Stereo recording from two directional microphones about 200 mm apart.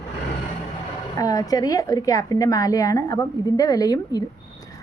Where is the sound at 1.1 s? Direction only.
15° left (ahead or behind).